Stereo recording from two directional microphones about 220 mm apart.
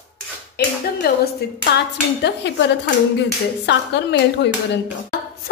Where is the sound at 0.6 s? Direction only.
45° left (ahead or behind).